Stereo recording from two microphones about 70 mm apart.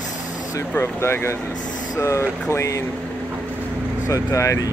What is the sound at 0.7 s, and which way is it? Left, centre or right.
Speech, left.